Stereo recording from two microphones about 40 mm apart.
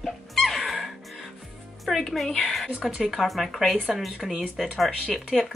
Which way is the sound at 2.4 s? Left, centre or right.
Centre.